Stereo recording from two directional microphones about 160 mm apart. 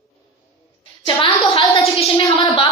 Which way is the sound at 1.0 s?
30° left (ahead or behind).